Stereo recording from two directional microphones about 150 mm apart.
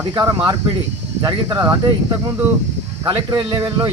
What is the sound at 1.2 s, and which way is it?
Speech, 30° right (ahead or behind).